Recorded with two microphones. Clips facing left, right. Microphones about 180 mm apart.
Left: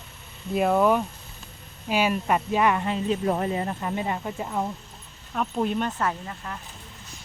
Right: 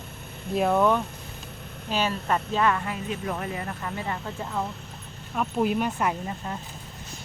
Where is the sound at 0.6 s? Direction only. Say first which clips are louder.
Left 1 dB; 5° left (ahead or behind).